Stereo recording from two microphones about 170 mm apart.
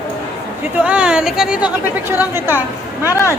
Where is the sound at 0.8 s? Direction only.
5° right (ahead or behind).